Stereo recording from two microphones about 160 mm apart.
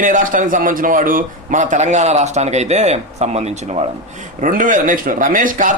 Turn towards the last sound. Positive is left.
turn(degrees=-55)  # may be behind; listen again after turning